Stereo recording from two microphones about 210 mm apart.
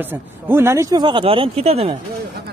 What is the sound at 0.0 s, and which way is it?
Speech, 10° right (ahead or behind).